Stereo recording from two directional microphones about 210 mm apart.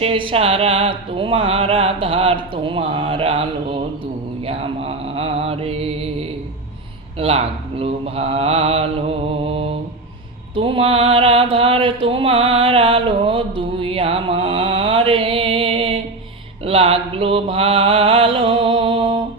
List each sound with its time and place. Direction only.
0.0 s music: 25° right (ahead or behind)
10.5 s mantra: 25° right (ahead or behind)